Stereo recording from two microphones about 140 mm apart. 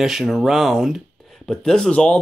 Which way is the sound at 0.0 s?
Centre (ahead or behind).